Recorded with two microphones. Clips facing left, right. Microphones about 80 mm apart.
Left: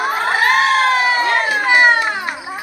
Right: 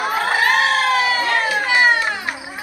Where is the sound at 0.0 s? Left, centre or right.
Left.